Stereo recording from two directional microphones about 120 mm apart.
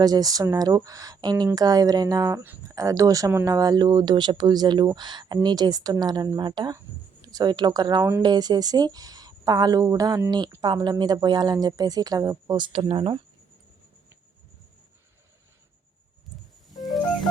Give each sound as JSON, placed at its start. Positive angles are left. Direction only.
{"t": 0.0, "sound": "speech", "side_deg": -30}
{"t": 16.7, "sound": "music", "side_deg": 0}